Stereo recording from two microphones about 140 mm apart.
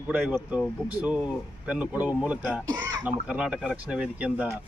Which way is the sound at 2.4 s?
5° left (ahead or behind).